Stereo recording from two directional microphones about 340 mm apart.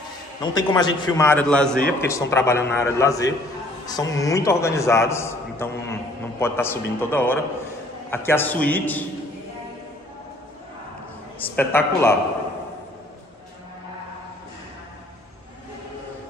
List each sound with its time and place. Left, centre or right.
0.4 s a man's voice: centre
11.3 s a man's voice: centre